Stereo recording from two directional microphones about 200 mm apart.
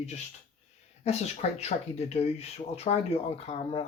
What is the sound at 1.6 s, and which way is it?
Speech, 30° left (ahead or behind).